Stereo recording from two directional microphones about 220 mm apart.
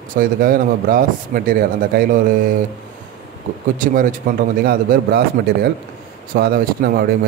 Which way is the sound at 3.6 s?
35° right (ahead or behind).